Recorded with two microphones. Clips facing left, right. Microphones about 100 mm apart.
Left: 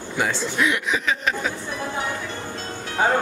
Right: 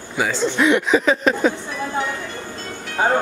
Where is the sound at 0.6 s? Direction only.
35° right (ahead or behind).